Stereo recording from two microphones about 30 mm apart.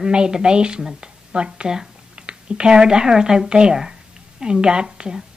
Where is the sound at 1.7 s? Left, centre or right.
Right.